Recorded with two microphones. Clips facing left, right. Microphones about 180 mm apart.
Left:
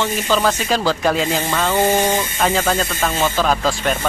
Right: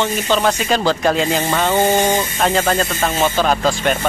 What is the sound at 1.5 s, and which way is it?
Speech, 15° right (ahead or behind).